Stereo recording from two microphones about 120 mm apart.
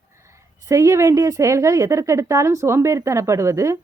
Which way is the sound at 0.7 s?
25° right (ahead or behind).